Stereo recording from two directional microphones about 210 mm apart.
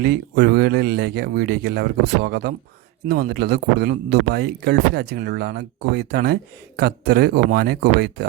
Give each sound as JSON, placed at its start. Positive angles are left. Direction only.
{"t": 0.0, "sound": "speech", "side_deg": -50}